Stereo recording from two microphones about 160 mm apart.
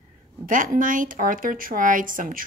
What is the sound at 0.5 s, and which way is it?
A woman's voice, 55° right (ahead or behind).